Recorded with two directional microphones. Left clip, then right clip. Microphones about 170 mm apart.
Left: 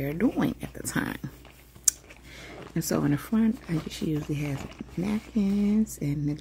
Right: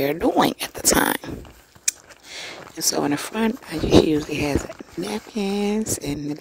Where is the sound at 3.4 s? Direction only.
45° right (ahead or behind).